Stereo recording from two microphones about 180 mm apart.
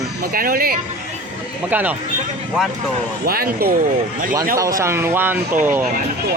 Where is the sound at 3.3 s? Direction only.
55° right (ahead or behind).